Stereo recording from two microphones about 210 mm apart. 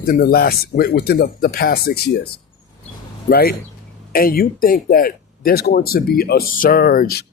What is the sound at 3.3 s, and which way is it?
A man's voice, 45° left (ahead or behind).